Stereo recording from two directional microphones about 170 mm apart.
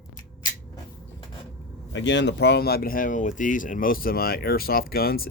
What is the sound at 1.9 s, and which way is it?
Speech, 90° left.